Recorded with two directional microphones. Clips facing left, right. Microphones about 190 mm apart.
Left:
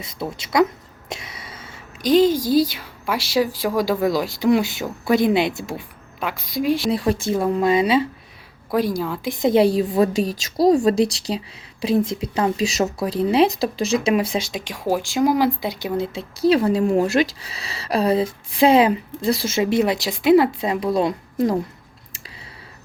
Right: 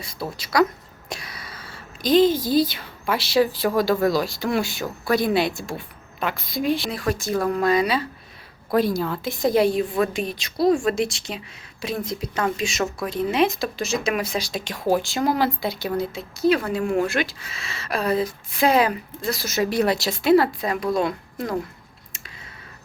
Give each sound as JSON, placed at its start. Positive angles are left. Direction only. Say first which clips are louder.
{"t": 0.0, "sound": "a woman's voice", "louder": "left 2 dB", "side_deg": 25}
{"t": 6.9, "sound": "speech", "louder": "left 4 dB", "side_deg": 30}
{"t": 8.7, "sound": "speech", "louder": "even", "side_deg": 10}
{"t": 9.4, "sound": "a woman's voice", "louder": "left 3 dB", "side_deg": 25}
{"t": 14.6, "sound": "speech", "louder": "right 1 dB", "side_deg": 10}
{"t": 16.1, "sound": "a woman's voice", "louder": "left 4 dB", "side_deg": 30}
{"t": 19.8, "sound": "speech", "louder": "left 2 dB", "side_deg": 15}